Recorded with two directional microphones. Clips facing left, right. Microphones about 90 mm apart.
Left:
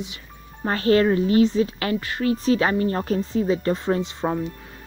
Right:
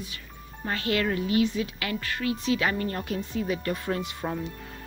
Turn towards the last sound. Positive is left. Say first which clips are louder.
# left 7 dB
turn(degrees=25)  # may be behind; listen again after turning